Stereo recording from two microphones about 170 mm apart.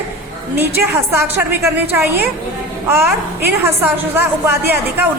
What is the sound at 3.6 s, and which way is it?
A woman's voice, 15° right (ahead or behind).